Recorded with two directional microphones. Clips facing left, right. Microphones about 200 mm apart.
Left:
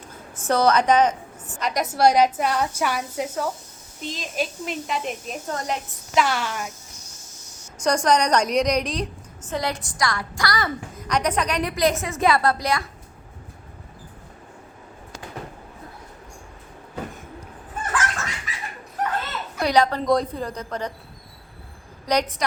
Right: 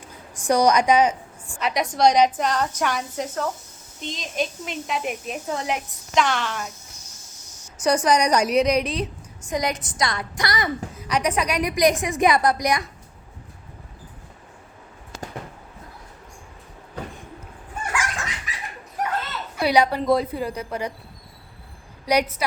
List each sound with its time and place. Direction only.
0.3 s a woman's voice: 15° right (ahead or behind)
6.2 s speech: 5° left (ahead or behind)
7.9 s a woman's voice: 5° right (ahead or behind)
9.5 s a woman's voice: 15° right (ahead or behind)
10.9 s a woman's voice: 10° right (ahead or behind)
17.9 s dog: 10° right (ahead or behind)
19.0 s children playing: 10° right (ahead or behind)
19.5 s a woman's voice: 10° right (ahead or behind)
22.0 s a woman's voice: 10° right (ahead or behind)